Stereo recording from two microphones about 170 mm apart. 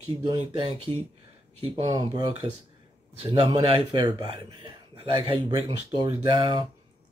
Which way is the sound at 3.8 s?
25° right (ahead or behind).